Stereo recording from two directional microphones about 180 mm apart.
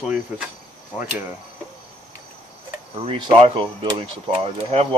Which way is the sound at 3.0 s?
30° right (ahead or behind).